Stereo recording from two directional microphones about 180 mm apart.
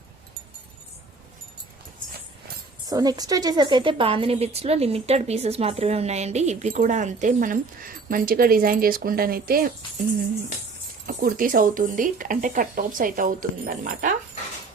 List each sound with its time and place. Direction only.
2.8 s a woman's voice: 20° right (ahead or behind); by 9.7 s 55° right (ahead or behind)
11.0 s speech: 50° right (ahead or behind)